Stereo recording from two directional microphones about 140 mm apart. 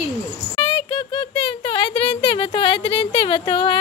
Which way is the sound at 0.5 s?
35° left (ahead or behind).